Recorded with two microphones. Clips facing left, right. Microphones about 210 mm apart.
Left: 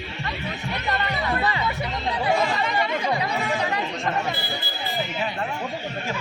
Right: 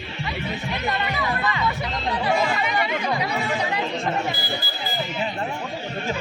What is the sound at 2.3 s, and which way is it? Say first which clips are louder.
Chatter: even; centre (ahead or behind).